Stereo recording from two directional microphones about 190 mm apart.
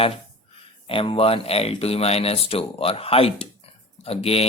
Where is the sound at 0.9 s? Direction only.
30° left (ahead or behind).